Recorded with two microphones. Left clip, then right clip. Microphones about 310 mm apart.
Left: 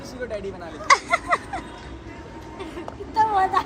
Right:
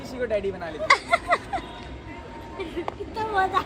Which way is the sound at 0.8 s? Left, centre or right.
Centre.